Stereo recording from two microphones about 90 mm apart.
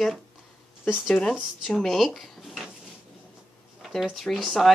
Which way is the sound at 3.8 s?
Centre (ahead or behind).